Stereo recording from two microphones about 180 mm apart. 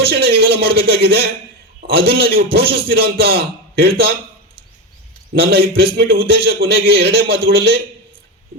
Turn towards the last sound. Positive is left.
turn(degrees=-60)  # may be behind; listen again after turning